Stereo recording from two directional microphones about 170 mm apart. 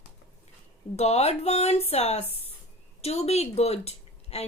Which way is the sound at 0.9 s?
40° left (ahead or behind).